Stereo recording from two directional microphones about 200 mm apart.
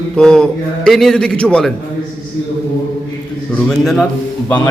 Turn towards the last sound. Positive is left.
turn(degrees=10)  # may be behind; listen again after turning